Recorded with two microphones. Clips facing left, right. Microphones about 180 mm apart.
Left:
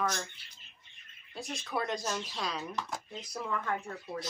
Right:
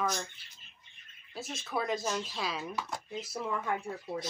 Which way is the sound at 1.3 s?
Centre (ahead or behind).